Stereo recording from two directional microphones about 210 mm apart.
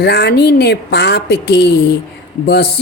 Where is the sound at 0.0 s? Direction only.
50° left (ahead or behind).